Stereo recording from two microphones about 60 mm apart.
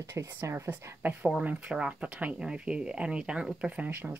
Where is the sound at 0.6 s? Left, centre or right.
Right.